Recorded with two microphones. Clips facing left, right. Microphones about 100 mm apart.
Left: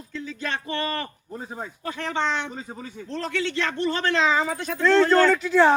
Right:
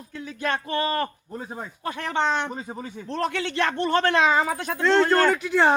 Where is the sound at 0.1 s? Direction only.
55° right (ahead or behind).